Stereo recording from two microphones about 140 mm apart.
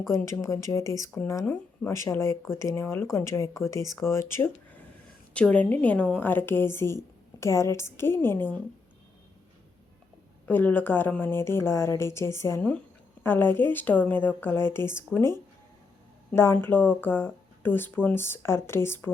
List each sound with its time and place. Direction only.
0.3 s a woman's voice: 20° left (ahead or behind)
10.4 s a woman's voice: 10° left (ahead or behind)